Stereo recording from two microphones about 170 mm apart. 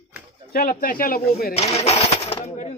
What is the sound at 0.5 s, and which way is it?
Speech, 60° left (ahead or behind).